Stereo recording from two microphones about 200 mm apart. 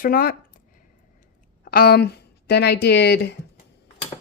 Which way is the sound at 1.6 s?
50° left (ahead or behind).